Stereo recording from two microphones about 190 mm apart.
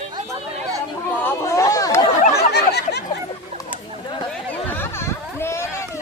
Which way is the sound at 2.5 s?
60° left (ahead or behind).